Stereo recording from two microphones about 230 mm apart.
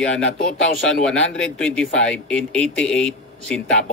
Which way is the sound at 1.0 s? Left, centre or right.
Centre.